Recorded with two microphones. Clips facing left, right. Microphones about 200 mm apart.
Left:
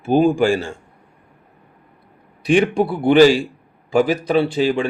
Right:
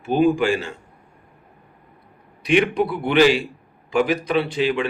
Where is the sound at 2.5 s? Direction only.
30° left (ahead or behind).